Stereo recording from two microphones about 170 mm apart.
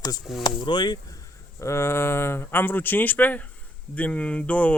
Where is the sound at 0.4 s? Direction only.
25° left (ahead or behind).